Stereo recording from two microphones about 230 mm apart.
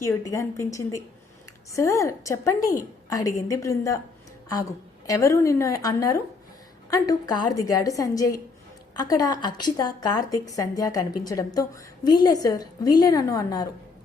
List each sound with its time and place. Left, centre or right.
0.0 s a woman's voice: centre
5.0 s a woman's voice: centre